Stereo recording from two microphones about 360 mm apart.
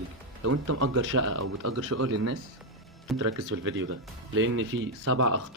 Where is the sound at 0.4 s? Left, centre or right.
Right.